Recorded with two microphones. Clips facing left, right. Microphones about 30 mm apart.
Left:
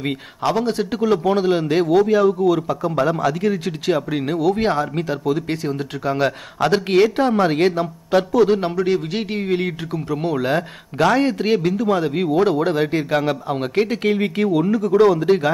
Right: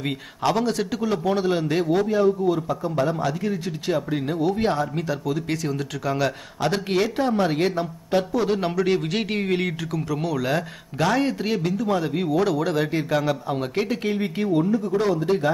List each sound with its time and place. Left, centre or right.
0.4 s speech: centre
0.9 s speech: left
1.9 s a man's voice: left
3.1 s speech: left
5.5 s speech: left
6.1 s speech: left
7.2 s speech: left
7.8 s a man's voice: left
8.5 s speech: centre
8.8 s speech: centre
9.8 s speech: left
14.7 s a man's voice: left
15.2 s speech: left